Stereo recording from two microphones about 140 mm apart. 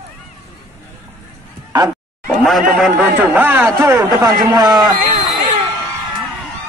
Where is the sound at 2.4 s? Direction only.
Centre (ahead or behind); by 4.9 s 30° right (ahead or behind).